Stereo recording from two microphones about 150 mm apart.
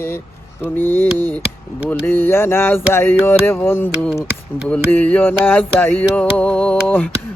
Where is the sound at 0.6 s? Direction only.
15° left (ahead or behind).